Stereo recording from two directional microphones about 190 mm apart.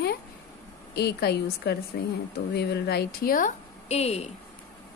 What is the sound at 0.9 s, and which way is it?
A woman's voice, 60° left (ahead or behind).